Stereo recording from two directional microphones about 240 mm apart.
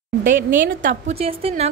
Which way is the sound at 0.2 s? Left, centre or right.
Right.